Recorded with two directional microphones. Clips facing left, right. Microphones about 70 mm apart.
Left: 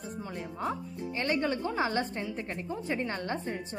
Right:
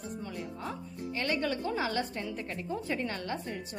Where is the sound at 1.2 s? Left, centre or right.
Left.